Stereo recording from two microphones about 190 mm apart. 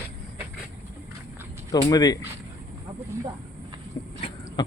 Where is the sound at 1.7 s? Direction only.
20° left (ahead or behind).